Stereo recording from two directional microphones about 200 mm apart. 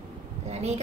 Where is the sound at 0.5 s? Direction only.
35° right (ahead or behind).